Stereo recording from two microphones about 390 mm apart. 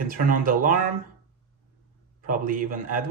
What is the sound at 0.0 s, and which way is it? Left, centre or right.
Speech, right.